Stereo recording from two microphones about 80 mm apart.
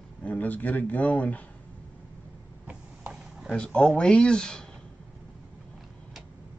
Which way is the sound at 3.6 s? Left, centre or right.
Centre.